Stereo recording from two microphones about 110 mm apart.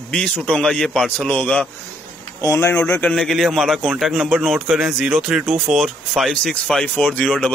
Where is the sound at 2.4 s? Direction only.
25° left (ahead or behind).